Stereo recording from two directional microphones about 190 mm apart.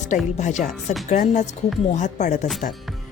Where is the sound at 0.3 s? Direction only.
40° left (ahead or behind).